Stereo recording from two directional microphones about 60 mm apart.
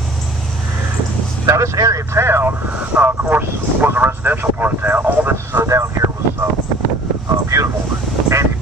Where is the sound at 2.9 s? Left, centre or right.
Right.